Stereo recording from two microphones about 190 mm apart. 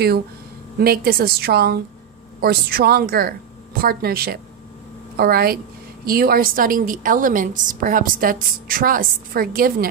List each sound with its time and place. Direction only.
0.7 s a woman's voice: 55° right (ahead or behind)